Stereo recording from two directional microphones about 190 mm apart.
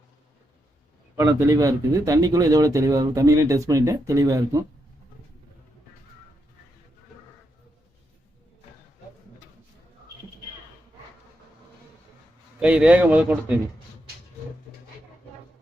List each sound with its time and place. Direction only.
1.1 s speech: 15° right (ahead or behind)
12.5 s speech: 5° right (ahead or behind)